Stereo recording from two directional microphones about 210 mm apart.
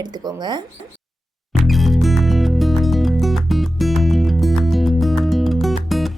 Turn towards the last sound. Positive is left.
turn(degrees=0)  # may be behind; listen again after turning